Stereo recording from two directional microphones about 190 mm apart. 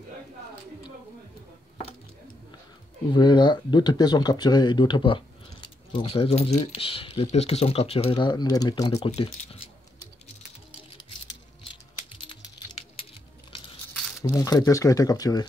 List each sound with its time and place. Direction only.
3.1 s speech: 25° left (ahead or behind)
14.2 s speech: 20° left (ahead or behind)